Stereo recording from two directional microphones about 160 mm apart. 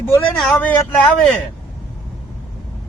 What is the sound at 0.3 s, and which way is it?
Speech, 5° left (ahead or behind).